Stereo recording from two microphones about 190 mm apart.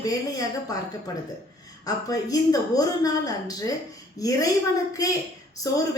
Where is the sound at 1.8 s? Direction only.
20° left (ahead or behind).